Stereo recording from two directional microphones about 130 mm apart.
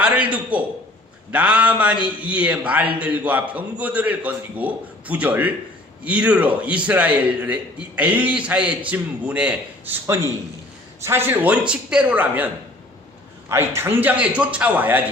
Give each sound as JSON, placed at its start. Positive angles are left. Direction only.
{"t": 0.0, "sound": "a man's voice", "side_deg": -10}
{"t": 11.0, "sound": "a man's voice", "side_deg": -15}
{"t": 13.5, "sound": "a man's voice", "side_deg": -20}